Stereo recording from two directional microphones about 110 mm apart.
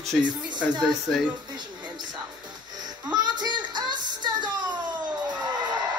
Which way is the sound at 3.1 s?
40° right (ahead or behind).